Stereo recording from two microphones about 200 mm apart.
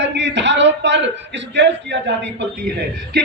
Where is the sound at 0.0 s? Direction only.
60° right (ahead or behind).